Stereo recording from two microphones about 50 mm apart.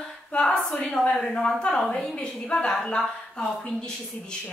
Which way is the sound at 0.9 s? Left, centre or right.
Centre.